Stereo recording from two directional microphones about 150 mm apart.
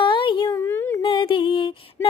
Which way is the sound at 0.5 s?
15° left (ahead or behind).